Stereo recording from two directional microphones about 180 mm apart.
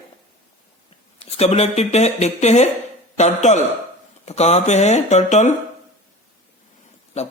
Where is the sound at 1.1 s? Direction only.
35° left (ahead or behind).